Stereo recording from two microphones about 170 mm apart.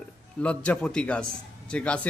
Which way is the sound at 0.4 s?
5° left (ahead or behind).